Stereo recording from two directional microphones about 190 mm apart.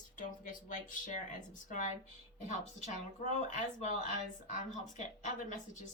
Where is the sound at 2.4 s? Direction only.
40° left (ahead or behind).